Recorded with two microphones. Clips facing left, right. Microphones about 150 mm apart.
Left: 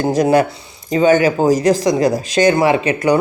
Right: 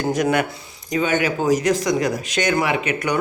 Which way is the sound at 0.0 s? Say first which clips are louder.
Left 6 dB; 30° left (ahead or behind).